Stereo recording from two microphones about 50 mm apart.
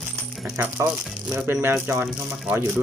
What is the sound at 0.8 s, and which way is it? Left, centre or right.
Speech, right.